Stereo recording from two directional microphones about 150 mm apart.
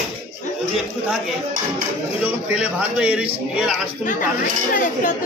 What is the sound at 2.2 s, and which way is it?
A man's voice, 10° right (ahead or behind).